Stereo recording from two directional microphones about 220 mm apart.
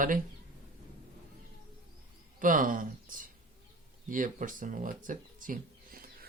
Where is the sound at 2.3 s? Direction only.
35° right (ahead or behind).